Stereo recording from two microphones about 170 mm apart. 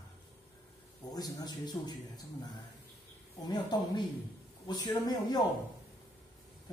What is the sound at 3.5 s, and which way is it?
A man's voice, 25° left (ahead or behind).